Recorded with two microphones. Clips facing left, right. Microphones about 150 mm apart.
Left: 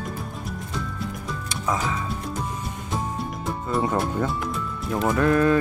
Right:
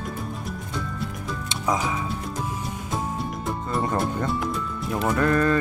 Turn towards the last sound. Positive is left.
turn(degrees=5)  # may be behind; listen again after turning